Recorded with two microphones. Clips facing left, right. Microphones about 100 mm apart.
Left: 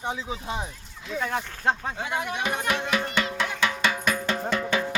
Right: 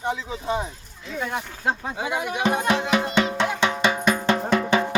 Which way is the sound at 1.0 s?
5° right (ahead or behind).